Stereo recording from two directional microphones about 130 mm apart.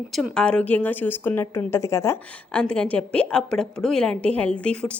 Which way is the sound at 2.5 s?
10° left (ahead or behind).